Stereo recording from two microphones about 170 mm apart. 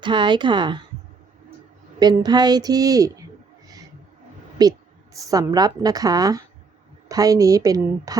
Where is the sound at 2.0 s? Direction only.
25° right (ahead or behind).